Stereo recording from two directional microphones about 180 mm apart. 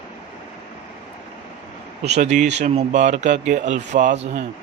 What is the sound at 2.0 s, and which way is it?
Speech, 40° right (ahead or behind).